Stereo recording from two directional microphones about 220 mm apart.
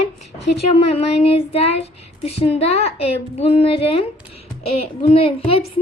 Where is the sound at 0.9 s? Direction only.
25° left (ahead or behind).